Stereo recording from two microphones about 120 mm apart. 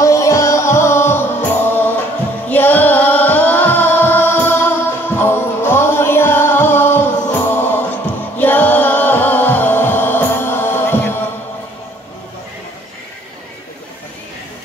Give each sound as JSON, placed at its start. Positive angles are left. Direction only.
{"t": 0.0, "sound": "music", "side_deg": 25}